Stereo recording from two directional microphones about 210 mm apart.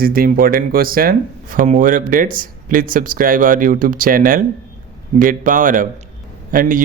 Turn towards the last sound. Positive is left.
turn(degrees=-40)  # may be behind; listen again after turning